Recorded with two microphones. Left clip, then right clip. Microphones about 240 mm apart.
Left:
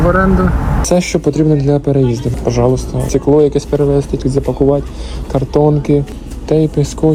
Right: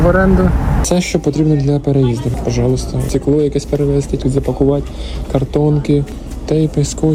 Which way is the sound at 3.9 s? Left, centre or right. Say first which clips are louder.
Left 2 dB; right.